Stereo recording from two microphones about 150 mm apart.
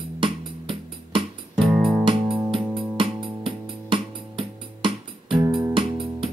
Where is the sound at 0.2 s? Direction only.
35° right (ahead or behind).